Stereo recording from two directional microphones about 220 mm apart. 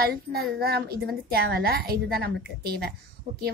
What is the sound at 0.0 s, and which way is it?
A woman's voice, 45° right (ahead or behind).